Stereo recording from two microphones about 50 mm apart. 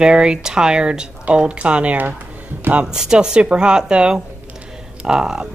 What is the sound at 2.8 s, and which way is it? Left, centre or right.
Speech, centre.